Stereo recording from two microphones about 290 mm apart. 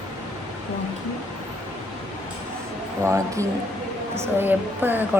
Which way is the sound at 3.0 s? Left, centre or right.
Centre.